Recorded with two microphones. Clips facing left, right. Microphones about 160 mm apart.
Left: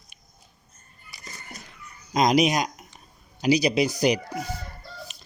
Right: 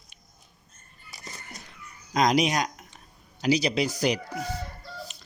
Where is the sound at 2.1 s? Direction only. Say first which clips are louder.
Left 2 dB; 15° left (ahead or behind).